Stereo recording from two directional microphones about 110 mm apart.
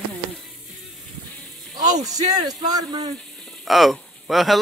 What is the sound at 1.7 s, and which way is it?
Music, 35° right (ahead or behind).